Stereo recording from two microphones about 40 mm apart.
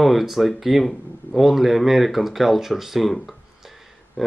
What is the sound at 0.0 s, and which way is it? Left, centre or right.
Speech, centre.